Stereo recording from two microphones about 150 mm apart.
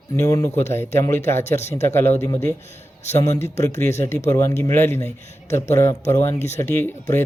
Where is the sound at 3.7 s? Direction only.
50° left (ahead or behind).